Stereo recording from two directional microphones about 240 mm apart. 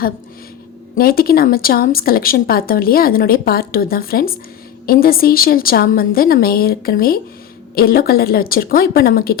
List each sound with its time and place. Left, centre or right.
0.9 s speech: left